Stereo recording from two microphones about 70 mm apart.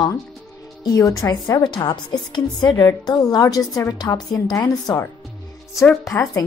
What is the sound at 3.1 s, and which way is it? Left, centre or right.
A woman's voice, left.